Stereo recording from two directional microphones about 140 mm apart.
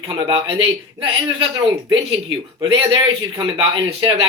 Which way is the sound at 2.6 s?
35° right (ahead or behind).